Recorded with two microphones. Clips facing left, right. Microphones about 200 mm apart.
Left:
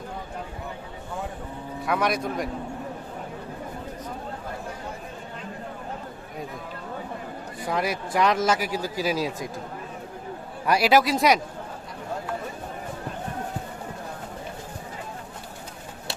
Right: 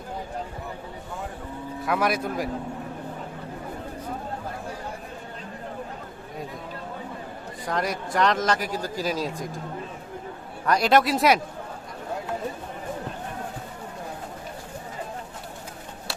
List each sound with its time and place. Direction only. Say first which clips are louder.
1.8 s speech: even; centre (ahead or behind)
7.7 s speech: left 1 dB; 5° left (ahead or behind)
10.7 s speech: even; 5° left (ahead or behind)